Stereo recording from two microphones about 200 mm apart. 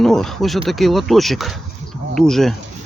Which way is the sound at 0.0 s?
Centre (ahead or behind).